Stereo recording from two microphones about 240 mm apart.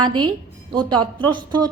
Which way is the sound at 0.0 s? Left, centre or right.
Centre.